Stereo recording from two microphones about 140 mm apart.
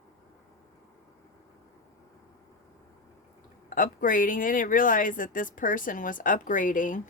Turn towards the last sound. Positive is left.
turn(degrees=70)  # may be behind; listen again after turning